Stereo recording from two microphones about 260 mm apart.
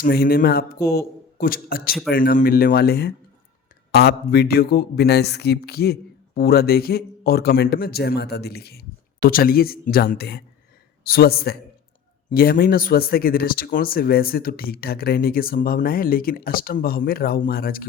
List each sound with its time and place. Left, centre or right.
0.0 s speech: left